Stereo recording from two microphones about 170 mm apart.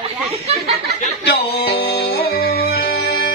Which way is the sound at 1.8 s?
70° left (ahead or behind).